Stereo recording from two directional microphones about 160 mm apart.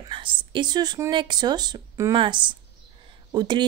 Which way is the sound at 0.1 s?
30° right (ahead or behind).